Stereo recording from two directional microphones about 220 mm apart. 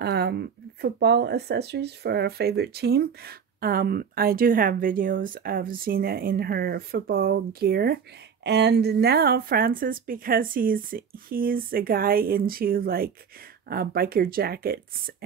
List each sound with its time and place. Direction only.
0.0 s speech: 50° right (ahead or behind)